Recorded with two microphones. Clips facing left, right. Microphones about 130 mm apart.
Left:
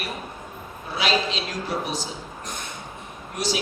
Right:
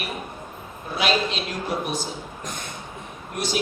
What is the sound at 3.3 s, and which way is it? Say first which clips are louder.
Speech: even; 50° right (ahead or behind).